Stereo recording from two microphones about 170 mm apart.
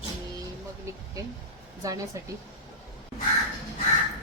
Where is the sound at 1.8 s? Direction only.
20° right (ahead or behind).